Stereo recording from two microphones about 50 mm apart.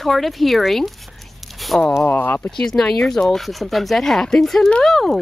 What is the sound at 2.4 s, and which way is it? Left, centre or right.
Speech, centre.